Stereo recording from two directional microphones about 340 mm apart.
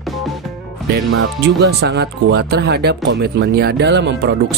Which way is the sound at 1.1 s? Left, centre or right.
Right.